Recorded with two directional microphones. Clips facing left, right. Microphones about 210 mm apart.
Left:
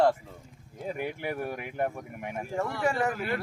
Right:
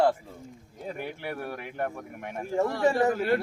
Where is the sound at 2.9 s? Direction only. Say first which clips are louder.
Right 6 dB; 35° right (ahead or behind).